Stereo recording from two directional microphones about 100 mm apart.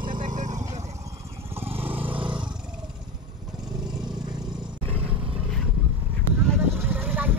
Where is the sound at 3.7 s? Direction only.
45° right (ahead or behind).